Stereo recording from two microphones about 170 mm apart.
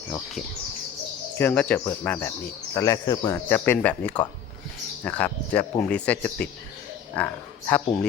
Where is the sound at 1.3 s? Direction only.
10° left (ahead or behind).